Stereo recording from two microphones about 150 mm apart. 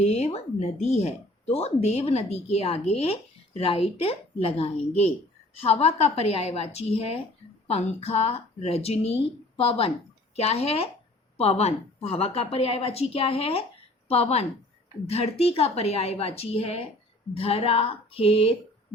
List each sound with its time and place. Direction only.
0.0 s a woman's voice: 45° left (ahead or behind)